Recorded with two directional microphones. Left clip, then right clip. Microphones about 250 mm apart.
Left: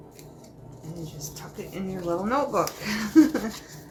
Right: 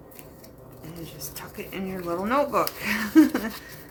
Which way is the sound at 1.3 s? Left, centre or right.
Right.